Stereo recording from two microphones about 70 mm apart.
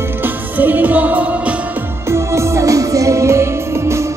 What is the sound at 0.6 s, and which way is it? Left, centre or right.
Music, right.